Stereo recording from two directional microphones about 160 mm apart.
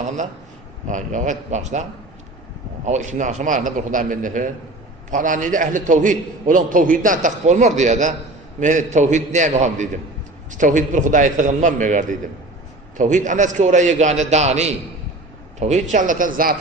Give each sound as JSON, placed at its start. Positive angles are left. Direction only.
{"t": 0.9, "sound": "a man's voice", "side_deg": -50}
{"t": 2.8, "sound": "a man's voice", "side_deg": -45}